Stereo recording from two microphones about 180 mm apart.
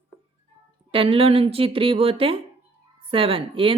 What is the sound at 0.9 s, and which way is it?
A woman's voice, 30° right (ahead or behind).